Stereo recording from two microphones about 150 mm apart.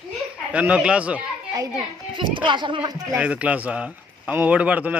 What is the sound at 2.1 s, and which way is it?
Speech, 35° right (ahead or behind).